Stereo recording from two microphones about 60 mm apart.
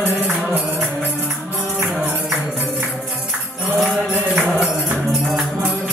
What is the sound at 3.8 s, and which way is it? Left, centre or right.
Music, centre.